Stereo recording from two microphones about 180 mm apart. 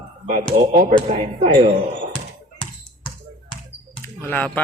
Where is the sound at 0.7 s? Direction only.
45° right (ahead or behind).